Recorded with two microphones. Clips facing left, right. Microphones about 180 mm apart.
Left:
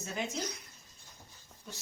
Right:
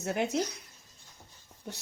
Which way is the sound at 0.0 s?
70° right (ahead or behind).